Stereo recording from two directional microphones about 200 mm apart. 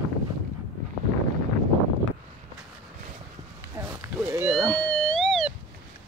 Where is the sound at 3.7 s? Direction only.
10° right (ahead or behind).